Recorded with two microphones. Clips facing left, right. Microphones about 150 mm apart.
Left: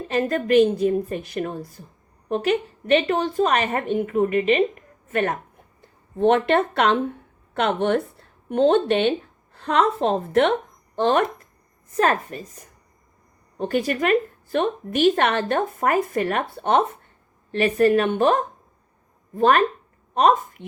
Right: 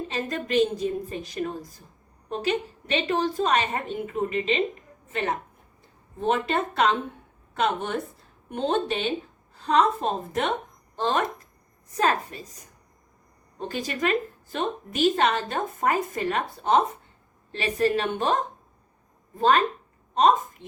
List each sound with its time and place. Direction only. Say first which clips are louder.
0.1 s a woman's voice: left 9 dB; 55° left (ahead or behind)
6.1 s a woman's voice: left 7 dB; 65° left (ahead or behind)
9.6 s speech: left 2 dB; 80° left
10.9 s a woman's voice: left 6 dB; 55° left (ahead or behind)
19.4 s a woman's voice: left 3 dB; 60° left (ahead or behind)